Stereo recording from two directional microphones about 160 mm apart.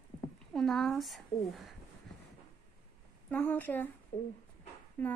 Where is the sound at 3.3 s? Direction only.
10° left (ahead or behind).